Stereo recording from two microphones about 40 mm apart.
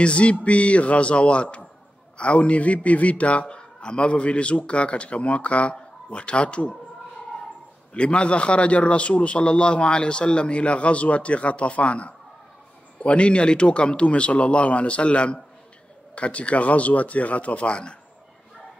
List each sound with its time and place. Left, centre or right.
0.0 s a man's voice: left
7.9 s a man's voice: left